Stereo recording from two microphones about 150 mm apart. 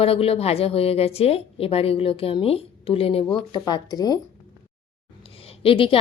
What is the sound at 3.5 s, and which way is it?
Speech, 25° left (ahead or behind).